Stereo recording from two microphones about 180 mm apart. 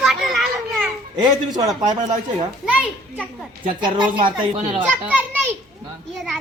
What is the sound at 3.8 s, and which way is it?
A woman's voice, 25° right (ahead or behind).